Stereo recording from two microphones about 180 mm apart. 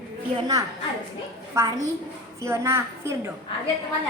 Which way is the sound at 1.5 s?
20° right (ahead or behind).